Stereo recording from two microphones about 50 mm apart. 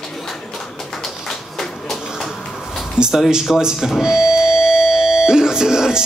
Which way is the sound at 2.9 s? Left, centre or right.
Centre.